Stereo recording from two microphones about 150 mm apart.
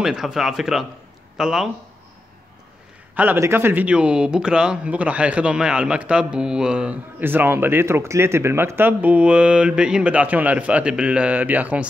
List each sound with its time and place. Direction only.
0.0 s speech: 5° right (ahead or behind)
3.2 s speech: 15° right (ahead or behind)